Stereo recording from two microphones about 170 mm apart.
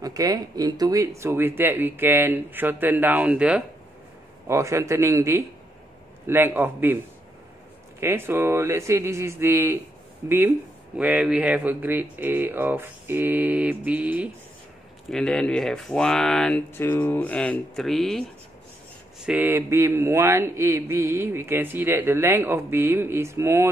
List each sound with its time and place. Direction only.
0.0 s speech: 20° right (ahead or behind)
4.5 s speech: 15° right (ahead or behind)
8.0 s speech: 15° right (ahead or behind)
15.0 s speech: 5° left (ahead or behind)
19.2 s speech: 10° right (ahead or behind)